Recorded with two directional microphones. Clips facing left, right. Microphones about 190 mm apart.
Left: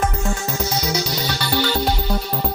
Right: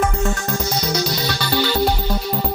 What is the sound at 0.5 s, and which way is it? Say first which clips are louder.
Music: right 1 dB; 10° left (ahead or behind).